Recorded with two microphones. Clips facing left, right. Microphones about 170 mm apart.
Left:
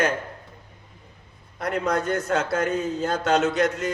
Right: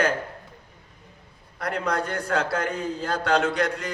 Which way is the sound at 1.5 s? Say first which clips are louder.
Left 2 dB; 20° left (ahead or behind).